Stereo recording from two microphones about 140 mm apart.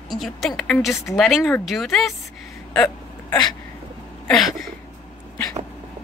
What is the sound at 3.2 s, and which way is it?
Speech, 30° left (ahead or behind).